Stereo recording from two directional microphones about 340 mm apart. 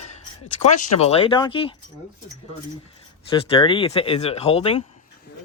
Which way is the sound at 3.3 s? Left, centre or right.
Centre.